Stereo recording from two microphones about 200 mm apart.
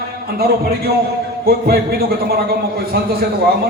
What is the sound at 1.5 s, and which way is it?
Speech, 50° right (ahead or behind).